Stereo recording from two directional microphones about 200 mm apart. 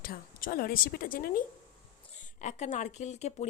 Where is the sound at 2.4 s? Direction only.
35° left (ahead or behind).